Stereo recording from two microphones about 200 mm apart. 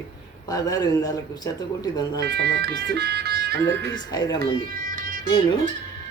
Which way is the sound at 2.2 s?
55° right (ahead or behind).